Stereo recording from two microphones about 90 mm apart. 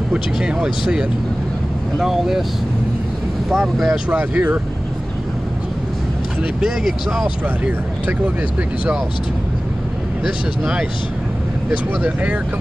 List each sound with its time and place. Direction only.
0.1 s speech: 10° right (ahead or behind)
3.4 s speech: 5° right (ahead or behind)
4.1 s speech: 20° right (ahead or behind)
6.4 s speech: 5° right (ahead or behind)
7.4 s speech: 15° right (ahead or behind)
10.2 s speech: 5° right (ahead or behind)
11.7 s speech: 15° right (ahead or behind)